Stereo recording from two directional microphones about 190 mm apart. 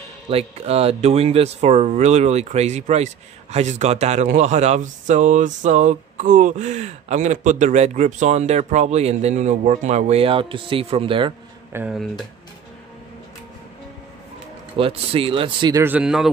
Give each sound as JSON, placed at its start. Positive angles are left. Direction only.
{"t": 0.3, "sound": "speech", "side_deg": -30}
{"t": 11.7, "sound": "speech", "side_deg": -5}
{"t": 14.8, "sound": "speech", "side_deg": -30}
{"t": 15.8, "sound": "speech", "side_deg": -5}